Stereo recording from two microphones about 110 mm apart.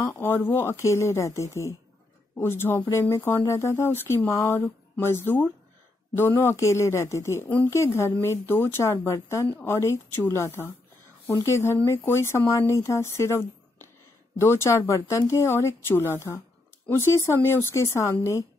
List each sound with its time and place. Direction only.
0.1 s speech: 20° left (ahead or behind)
7.4 s a woman's voice: 15° left (ahead or behind)
7.7 s speech: 25° left (ahead or behind)